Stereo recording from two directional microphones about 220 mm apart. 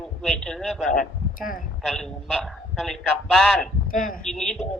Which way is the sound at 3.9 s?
40° left (ahead or behind).